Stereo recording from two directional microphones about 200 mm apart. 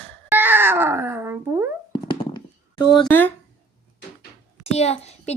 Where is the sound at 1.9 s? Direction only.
20° left (ahead or behind).